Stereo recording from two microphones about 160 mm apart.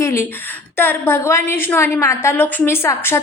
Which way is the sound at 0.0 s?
15° left (ahead or behind).